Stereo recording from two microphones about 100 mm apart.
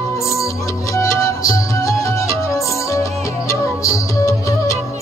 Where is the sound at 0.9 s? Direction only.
30° left (ahead or behind).